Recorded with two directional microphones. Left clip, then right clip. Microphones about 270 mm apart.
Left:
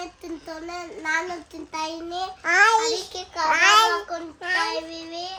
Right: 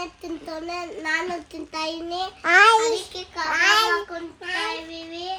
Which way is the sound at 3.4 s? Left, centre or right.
Left.